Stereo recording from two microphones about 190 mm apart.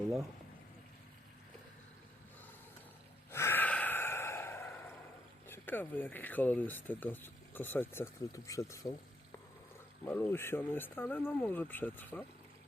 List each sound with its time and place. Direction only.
3.3 s sigh: 10° left (ahead or behind)
5.5 s speech: 10° left (ahead or behind)
10.1 s speech: 10° left (ahead or behind)